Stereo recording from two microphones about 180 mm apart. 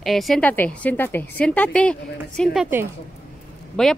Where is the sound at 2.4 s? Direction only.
5° right (ahead or behind).